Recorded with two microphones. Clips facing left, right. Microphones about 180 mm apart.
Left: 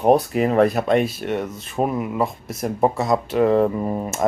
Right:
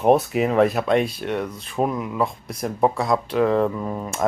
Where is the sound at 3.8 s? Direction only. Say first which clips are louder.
Left 4 dB; 25° left (ahead or behind).